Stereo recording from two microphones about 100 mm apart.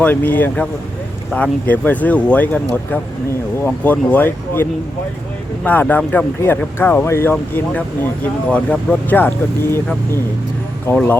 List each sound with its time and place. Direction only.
0.0 s speech: 15° left (ahead or behind)
3.6 s speech: 15° left (ahead or behind)